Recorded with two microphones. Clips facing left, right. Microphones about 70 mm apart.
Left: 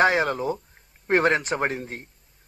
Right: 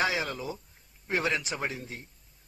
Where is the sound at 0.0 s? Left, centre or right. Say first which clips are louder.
Left 9 dB; left.